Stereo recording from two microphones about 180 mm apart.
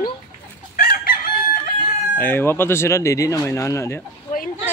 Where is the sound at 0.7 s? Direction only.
55° left (ahead or behind).